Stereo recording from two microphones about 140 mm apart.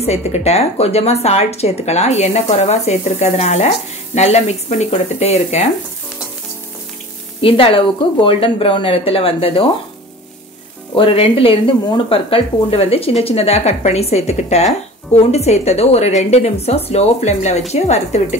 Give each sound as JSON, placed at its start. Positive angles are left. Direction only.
{"t": 0.0, "sound": "speech", "side_deg": 50}
{"t": 7.4, "sound": "a woman's voice", "side_deg": 40}
{"t": 11.0, "sound": "a woman's voice", "side_deg": 40}